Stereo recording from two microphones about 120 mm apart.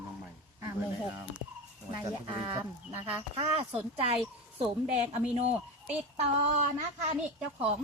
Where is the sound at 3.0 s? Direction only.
50° right (ahead or behind).